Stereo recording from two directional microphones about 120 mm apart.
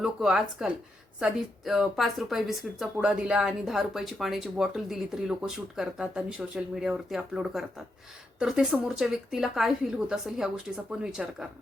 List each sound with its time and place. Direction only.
0.0 s speech: 5° right (ahead or behind)